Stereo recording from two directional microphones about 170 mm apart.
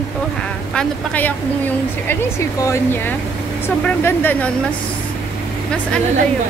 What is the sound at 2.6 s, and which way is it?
Speech, 15° left (ahead or behind).